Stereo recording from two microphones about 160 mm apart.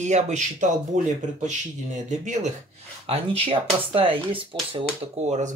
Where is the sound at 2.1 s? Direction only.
50° right (ahead or behind).